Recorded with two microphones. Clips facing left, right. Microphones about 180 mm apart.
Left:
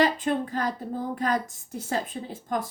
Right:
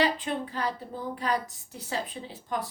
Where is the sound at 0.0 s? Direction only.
45° left (ahead or behind).